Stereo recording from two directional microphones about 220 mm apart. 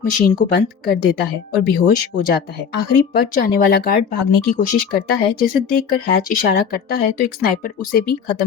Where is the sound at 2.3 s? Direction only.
45° left (ahead or behind).